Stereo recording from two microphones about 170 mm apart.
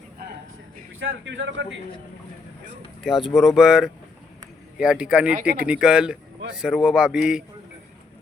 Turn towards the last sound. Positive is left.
turn(degrees=-5)  # may be behind; listen again after turning